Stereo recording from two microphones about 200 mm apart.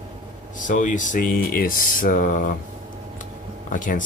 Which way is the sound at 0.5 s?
40° left (ahead or behind).